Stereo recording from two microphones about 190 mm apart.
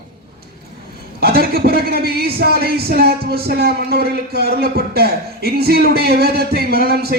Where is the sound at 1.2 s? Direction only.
55° right (ahead or behind).